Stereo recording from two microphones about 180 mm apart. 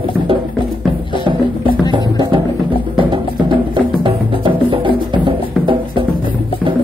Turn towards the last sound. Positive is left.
turn(degrees=-25)  # may be behind; listen again after turning